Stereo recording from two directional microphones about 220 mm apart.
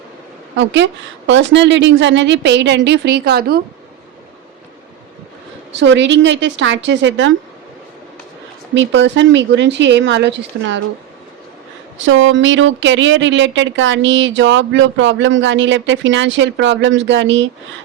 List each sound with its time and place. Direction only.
0.5 s a woman's voice: 55° right (ahead or behind)
5.7 s speech: 55° right (ahead or behind)
8.7 s speech: 55° right (ahead or behind)
11.9 s speech: 60° right (ahead or behind)